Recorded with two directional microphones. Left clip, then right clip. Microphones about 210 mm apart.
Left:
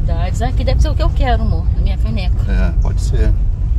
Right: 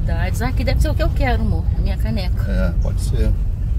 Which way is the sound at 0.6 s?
40° right (ahead or behind).